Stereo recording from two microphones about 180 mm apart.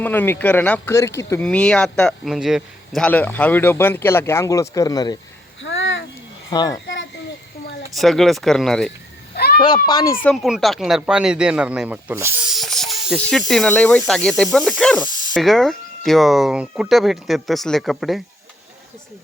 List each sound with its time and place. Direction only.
0.0 s a man's voice: 10° left (ahead or behind)
1.5 s a man's voice: 5° left (ahead or behind); by 5.2 s 20° left (ahead or behind)
5.6 s a sound: 90° left
6.5 s a child's voice: 20° left (ahead or behind)
6.8 s a sound: 90° left
7.9 s speech: centre (ahead or behind)
9.3 s a sound: 60° left (ahead or behind)
9.6 s a child's voice: 25° left (ahead or behind)
10.2 s speech: centre (ahead or behind)
12.5 s snake: centre (ahead or behind)
13.5 s a man's voice: 5° left (ahead or behind)